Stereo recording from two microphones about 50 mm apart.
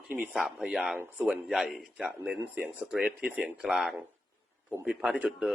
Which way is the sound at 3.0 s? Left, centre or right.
Right.